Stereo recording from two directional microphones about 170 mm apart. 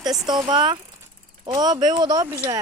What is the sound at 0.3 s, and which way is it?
Speech, 25° right (ahead or behind).